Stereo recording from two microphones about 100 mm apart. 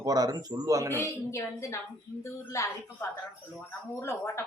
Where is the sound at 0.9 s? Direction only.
30° left (ahead or behind).